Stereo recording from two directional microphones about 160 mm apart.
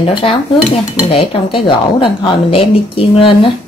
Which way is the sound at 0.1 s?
35° left (ahead or behind).